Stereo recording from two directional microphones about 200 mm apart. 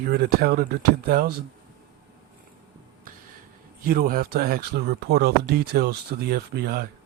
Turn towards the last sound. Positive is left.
turn(degrees=-50)  # may be behind; listen again after turning